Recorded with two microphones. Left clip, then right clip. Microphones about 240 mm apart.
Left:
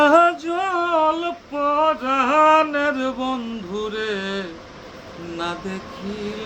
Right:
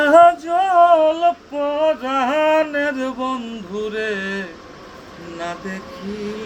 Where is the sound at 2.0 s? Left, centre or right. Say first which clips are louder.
Left 2 dB; centre.